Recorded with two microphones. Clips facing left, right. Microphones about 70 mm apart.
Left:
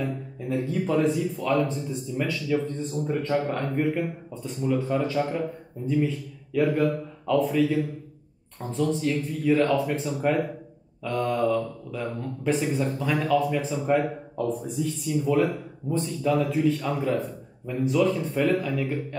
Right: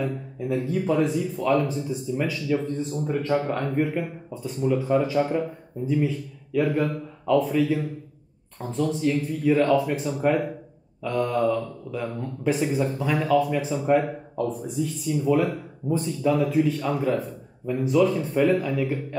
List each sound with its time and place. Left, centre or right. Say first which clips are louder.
0.0 s a man's voice: right 2 dB; centre